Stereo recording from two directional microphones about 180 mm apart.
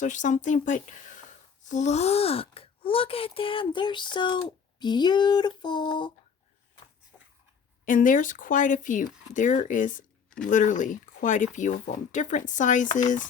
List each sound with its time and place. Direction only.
0.0 s speech: 45° left (ahead or behind); by 6.1 s 25° left (ahead or behind)
7.9 s speech: 45° left (ahead or behind)